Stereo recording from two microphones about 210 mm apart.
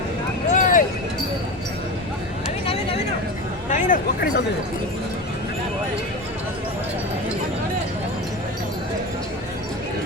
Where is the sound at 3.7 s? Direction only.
40° left (ahead or behind).